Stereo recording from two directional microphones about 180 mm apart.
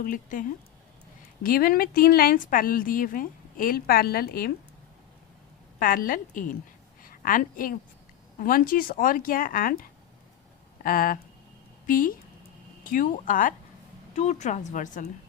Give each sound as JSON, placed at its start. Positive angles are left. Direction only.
{"t": 0.0, "sound": "a woman's voice", "side_deg": 50}
{"t": 1.5, "sound": "a woman's voice", "side_deg": 55}
{"t": 5.8, "sound": "a woman's voice", "side_deg": 50}
{"t": 10.8, "sound": "a woman's voice", "side_deg": 50}